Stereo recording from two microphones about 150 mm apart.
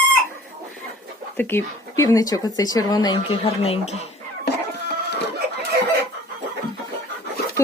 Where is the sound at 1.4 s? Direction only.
15° left (ahead or behind).